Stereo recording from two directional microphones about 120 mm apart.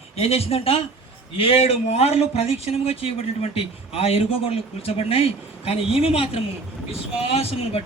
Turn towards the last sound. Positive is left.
turn(degrees=55)  # may be behind; listen again after turning